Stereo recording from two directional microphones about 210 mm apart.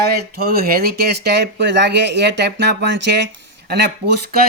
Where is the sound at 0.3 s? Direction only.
45° right (ahead or behind).